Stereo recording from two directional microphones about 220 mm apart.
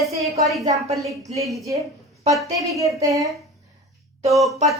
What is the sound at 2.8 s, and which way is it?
Speech, 15° right (ahead or behind).